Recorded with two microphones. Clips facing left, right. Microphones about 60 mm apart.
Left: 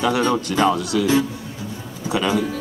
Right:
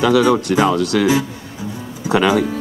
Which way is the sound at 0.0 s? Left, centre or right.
Right.